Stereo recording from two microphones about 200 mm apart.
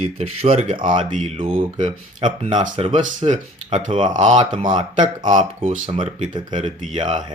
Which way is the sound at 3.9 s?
25° right (ahead or behind).